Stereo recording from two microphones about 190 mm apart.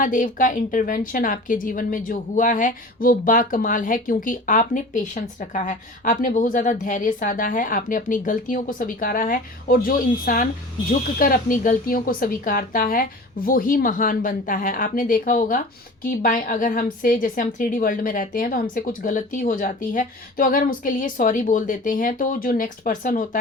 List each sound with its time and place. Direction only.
0.0 s a woman's voice: 45° left (ahead or behind)